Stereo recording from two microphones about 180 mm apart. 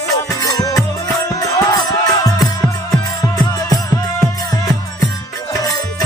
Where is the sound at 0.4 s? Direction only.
20° left (ahead or behind).